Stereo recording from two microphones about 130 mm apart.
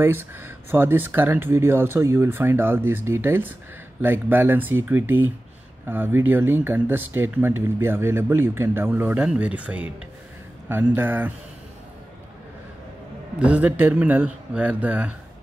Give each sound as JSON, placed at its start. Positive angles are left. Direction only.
{"t": 0.0, "sound": "speech", "side_deg": -15}
{"t": 13.4, "sound": "speech", "side_deg": -10}